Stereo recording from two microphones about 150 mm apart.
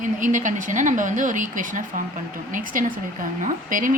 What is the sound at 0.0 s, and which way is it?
A woman's voice, 60° right (ahead or behind).